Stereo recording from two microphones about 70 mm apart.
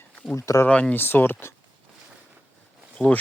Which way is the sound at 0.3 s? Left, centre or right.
Left.